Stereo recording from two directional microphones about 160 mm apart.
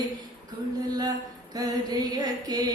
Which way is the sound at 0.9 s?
25° right (ahead or behind).